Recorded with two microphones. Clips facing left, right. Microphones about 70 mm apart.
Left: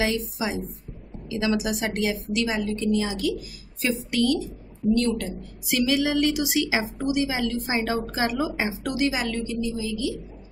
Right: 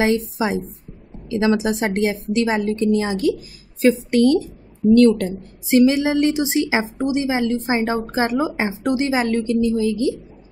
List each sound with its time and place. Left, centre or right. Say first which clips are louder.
0.0 s a woman's voice: right 7 dB; right
4.9 s a woman's voice: right 12 dB; right
5.4 s a woman's voice: right 11 dB; right
9.5 s a woman's voice: right 10 dB; right